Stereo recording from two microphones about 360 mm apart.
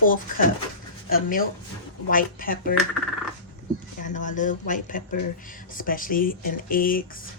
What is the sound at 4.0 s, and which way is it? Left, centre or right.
Speech, left.